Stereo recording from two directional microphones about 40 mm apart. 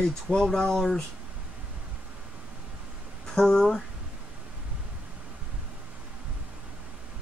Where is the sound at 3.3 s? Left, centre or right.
Centre.